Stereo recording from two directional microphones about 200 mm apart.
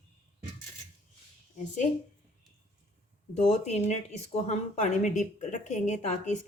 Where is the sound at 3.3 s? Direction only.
35° left (ahead or behind).